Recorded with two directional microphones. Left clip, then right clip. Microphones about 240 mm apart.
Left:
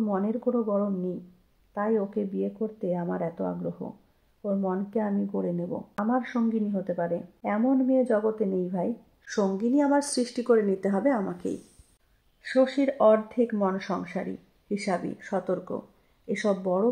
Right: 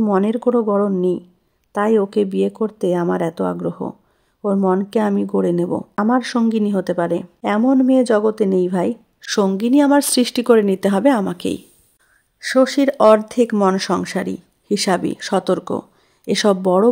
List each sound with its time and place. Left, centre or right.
0.0 s speech: right